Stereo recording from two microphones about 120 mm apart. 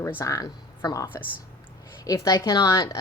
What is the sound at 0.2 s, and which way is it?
A woman's voice, 25° left (ahead or behind).